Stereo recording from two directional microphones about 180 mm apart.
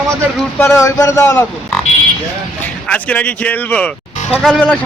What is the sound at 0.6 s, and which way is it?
Speech, 15° left (ahead or behind).